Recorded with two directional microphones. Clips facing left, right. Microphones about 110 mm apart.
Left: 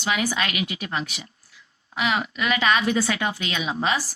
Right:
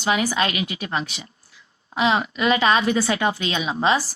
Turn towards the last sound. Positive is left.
turn(degrees=-30)  # may be behind; listen again after turning